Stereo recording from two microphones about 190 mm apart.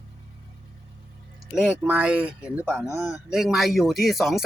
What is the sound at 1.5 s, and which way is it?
Speech, 5° right (ahead or behind).